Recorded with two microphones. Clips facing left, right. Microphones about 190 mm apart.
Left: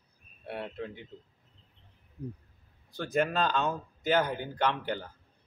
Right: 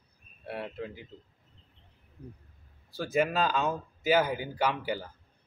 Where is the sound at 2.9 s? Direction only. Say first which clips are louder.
Right 1 dB; 5° right (ahead or behind).